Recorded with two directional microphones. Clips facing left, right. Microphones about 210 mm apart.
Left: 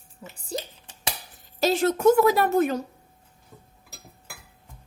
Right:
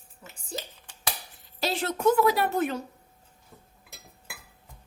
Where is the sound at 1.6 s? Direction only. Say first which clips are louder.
Left 7 dB; 45° left (ahead or behind).